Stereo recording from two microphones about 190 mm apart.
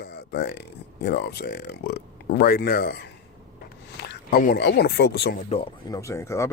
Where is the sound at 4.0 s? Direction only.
60° left (ahead or behind).